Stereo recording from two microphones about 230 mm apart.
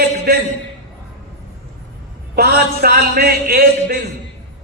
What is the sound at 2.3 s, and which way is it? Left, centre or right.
Speech, right.